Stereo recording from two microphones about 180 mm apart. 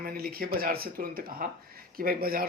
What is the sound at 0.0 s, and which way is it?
Speech, 55° right (ahead or behind).